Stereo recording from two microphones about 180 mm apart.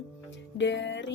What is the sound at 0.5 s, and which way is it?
Music, 85° left.